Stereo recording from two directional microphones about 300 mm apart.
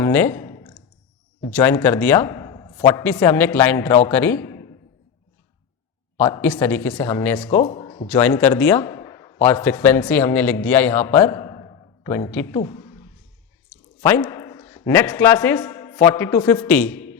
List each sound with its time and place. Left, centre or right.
0.0 s clicking: centre
1.5 s a man's voice: centre
6.1 s a man's voice: centre
7.6 s a sound: centre
8.0 s a man's voice: centre
14.0 s a man's voice: centre